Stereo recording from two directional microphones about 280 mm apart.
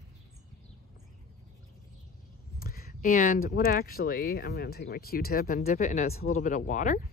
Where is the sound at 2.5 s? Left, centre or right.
Left.